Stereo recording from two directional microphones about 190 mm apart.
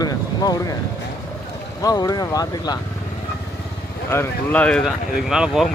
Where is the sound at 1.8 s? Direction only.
20° left (ahead or behind).